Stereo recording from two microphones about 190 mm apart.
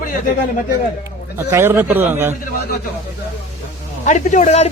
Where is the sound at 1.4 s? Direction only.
15° right (ahead or behind).